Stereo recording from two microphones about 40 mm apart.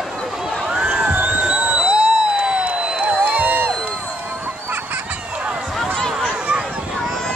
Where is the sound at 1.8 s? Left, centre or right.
Right.